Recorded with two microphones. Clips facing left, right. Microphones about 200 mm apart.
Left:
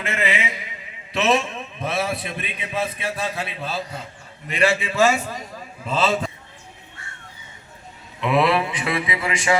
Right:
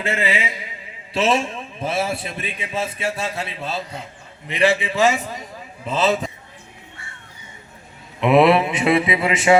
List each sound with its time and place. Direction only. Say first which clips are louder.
0.0 s a sound: right 2 dB; 30° right (ahead or behind)
1.1 s a man's voice: right 1 dB; 30° right (ahead or behind)
8.2 s a man's voice: right 5 dB; 25° right (ahead or behind)